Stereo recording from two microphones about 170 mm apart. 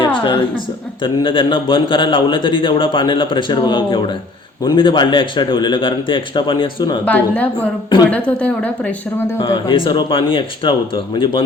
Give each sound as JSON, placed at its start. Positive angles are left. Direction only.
{"t": 0.0, "sound": "a sound", "side_deg": 30}
{"t": 1.0, "sound": "a man's voice", "side_deg": 30}
{"t": 7.0, "sound": "speech", "side_deg": 10}
{"t": 9.6, "sound": "a man's voice", "side_deg": 30}